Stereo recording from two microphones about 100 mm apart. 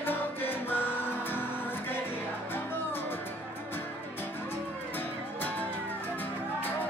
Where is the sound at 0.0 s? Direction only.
20° left (ahead or behind).